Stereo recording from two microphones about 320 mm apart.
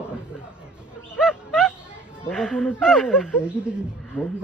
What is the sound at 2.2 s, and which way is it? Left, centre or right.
Speech, centre.